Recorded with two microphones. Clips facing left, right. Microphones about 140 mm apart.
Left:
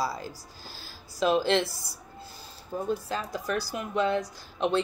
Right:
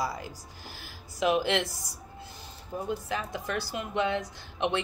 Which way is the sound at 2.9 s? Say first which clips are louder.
Left 2 dB; 20° right (ahead or behind).